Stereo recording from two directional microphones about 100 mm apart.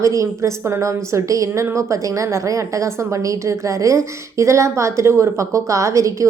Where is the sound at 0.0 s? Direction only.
30° right (ahead or behind).